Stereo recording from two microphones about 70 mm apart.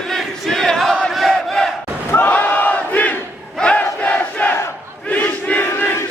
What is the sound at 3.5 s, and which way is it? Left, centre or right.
Crowd, centre.